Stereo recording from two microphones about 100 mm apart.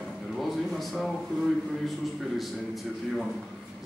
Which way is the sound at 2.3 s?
Centre (ahead or behind).